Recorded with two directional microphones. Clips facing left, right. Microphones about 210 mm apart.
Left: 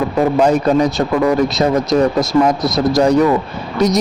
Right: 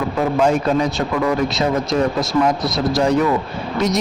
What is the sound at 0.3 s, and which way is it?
Speech, 40° left (ahead or behind).